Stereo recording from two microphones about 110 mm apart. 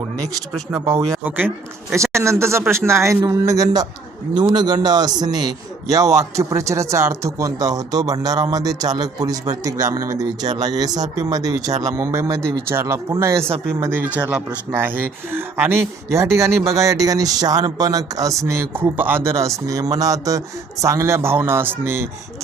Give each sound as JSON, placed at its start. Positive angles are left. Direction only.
{"t": 0.7, "sound": "a man's voice", "side_deg": -30}
{"t": 13.9, "sound": "a man's voice", "side_deg": -15}